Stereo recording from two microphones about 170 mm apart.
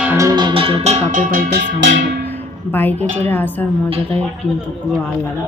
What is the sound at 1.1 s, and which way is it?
Music, 50° right (ahead or behind).